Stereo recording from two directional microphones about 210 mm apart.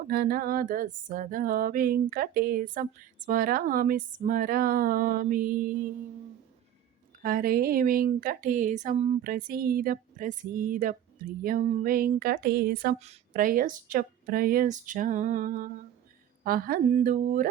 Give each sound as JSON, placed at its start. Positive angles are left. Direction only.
{"t": 0.1, "sound": "female singing", "side_deg": -45}
{"t": 4.2, "sound": "speech", "side_deg": -40}
{"t": 7.2, "sound": "speech", "side_deg": -45}
{"t": 11.4, "sound": "female singing", "side_deg": -40}
{"t": 13.0, "sound": "speech", "side_deg": -35}